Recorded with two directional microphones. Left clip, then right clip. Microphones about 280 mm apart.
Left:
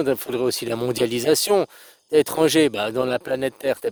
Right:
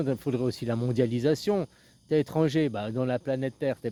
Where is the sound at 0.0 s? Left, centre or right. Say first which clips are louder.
Left 7 dB; left.